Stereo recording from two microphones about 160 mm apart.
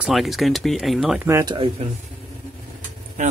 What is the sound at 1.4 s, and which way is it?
Speech, 30° right (ahead or behind).